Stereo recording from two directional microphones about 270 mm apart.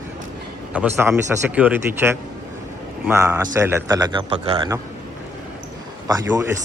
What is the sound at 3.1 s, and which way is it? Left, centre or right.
A man's voice, centre.